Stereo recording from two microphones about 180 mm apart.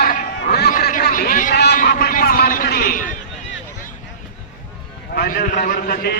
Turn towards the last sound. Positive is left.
turn(degrees=55)  # may be behind; listen again after turning